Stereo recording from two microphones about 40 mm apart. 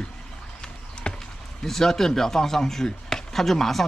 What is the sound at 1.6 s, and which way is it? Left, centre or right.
Speech, centre.